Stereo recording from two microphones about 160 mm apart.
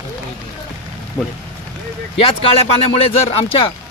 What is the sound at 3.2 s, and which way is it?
Speech, 35° left (ahead or behind).